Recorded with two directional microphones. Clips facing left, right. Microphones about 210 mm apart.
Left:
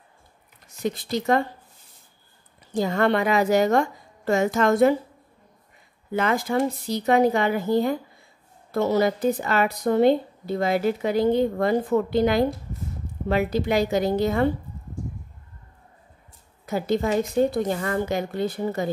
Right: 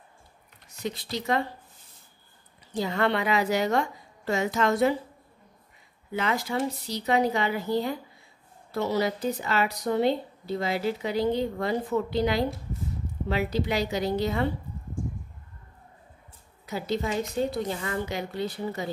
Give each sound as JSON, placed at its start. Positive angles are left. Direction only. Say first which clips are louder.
{"t": 0.8, "sound": "speech", "louder": "left 6 dB", "side_deg": 50}
{"t": 2.7, "sound": "speech", "louder": "left 5 dB", "side_deg": 45}
{"t": 6.1, "sound": "speech", "louder": "left 5 dB", "side_deg": 50}
{"t": 16.6, "sound": "speech", "louder": "left 6 dB", "side_deg": 50}